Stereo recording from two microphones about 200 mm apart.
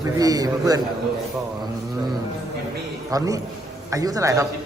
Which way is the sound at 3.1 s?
15° right (ahead or behind).